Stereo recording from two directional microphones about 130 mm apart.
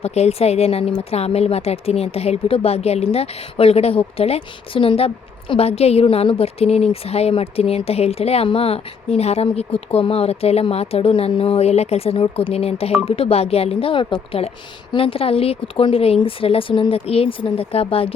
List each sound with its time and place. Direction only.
0.0 s speech: 55° left (ahead or behind)